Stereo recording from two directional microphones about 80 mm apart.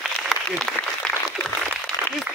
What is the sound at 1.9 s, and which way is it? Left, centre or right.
Applause, left.